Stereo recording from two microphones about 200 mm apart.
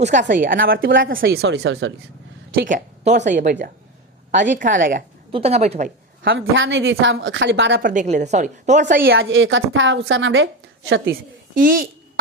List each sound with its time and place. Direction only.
0.0 s a woman's voice: 40° right (ahead or behind); by 1.9 s 60° right (ahead or behind)
2.6 s a woman's voice: 40° right (ahead or behind)
5.3 s a woman's voice: 30° right (ahead or behind)
6.3 s a woman's voice: 75° right (ahead or behind)
7.8 s a woman's voice: 40° right (ahead or behind)
9.1 s a woman's voice: 75° right (ahead or behind)
11.1 s a woman's voice: 45° right (ahead or behind)